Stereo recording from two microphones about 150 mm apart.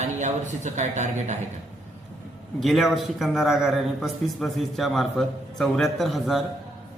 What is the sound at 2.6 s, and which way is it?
A man's voice, centre (ahead or behind).